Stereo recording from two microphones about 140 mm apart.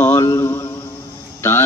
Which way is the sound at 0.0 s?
20° left (ahead or behind).